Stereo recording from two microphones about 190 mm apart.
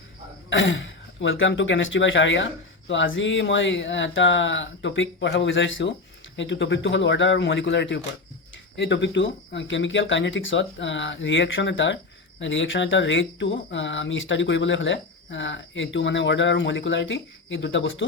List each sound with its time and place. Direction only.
0.5 s speech: 80° left